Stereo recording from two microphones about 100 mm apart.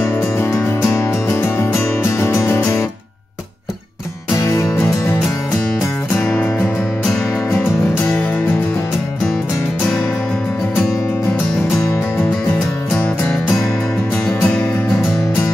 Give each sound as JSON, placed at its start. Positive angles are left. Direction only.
{"t": 0.4, "sound": "music", "side_deg": 25}
{"t": 4.4, "sound": "music", "side_deg": 30}
{"t": 6.2, "sound": "music", "side_deg": 20}
{"t": 8.0, "sound": "music", "side_deg": 15}
{"t": 12.9, "sound": "music", "side_deg": 15}
{"t": 14.4, "sound": "music", "side_deg": 15}